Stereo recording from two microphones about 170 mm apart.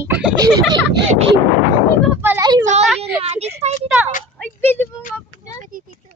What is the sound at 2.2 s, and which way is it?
Speech, 15° right (ahead or behind).